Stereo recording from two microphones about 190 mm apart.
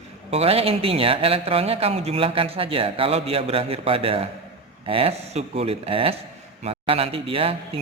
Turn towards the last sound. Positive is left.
turn(degrees=-30)  # may be behind; listen again after turning